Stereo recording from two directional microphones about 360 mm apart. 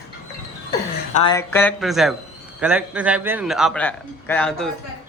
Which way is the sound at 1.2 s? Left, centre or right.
Centre.